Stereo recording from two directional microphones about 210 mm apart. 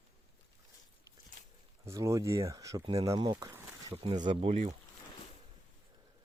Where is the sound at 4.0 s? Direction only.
30° right (ahead or behind).